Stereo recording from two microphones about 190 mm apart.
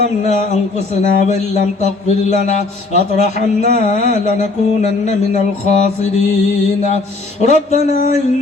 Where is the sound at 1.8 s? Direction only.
35° left (ahead or behind).